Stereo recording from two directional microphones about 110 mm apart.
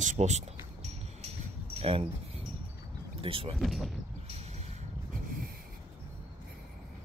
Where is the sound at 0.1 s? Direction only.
90° right.